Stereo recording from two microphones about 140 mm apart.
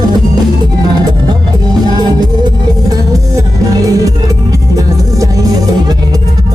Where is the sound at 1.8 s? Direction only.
30° right (ahead or behind).